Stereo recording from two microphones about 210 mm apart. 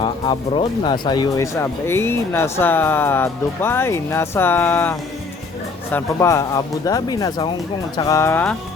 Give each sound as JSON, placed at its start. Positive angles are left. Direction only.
{"t": 0.0, "sound": "speech", "side_deg": 25}